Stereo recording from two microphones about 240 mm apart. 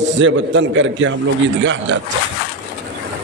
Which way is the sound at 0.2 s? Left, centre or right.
Right.